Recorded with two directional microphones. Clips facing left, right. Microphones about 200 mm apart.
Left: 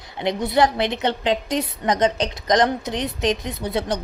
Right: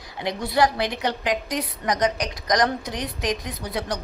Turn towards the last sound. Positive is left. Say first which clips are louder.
# left 5 dB
turn(degrees=25)  # may be behind; listen again after turning